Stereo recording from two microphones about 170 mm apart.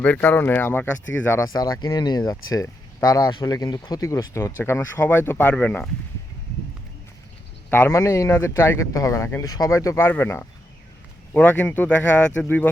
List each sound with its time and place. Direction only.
0.0 s speech: 10° left (ahead or behind)
7.7 s speech: 15° left (ahead or behind)